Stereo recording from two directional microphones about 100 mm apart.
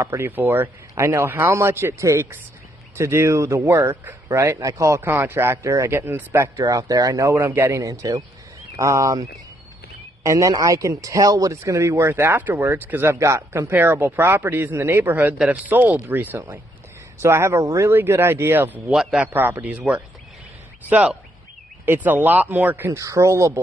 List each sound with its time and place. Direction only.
0.2 s a man's voice: 20° right (ahead or behind); by 7.3 s 35° right (ahead or behind)
7.3 s a man's voice: 20° right (ahead or behind)
18.9 s a man's voice: 5° right (ahead or behind)
19.2 s speech: 20° right (ahead or behind)
22.8 s a man's voice: 30° right (ahead or behind)